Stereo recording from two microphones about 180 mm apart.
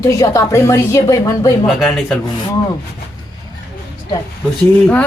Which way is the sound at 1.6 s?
Centre (ahead or behind).